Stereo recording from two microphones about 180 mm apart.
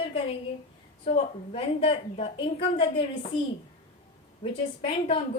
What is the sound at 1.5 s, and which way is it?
A woman's voice, 30° left (ahead or behind).